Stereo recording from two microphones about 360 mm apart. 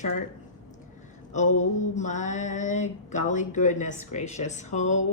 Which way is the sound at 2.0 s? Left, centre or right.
Centre.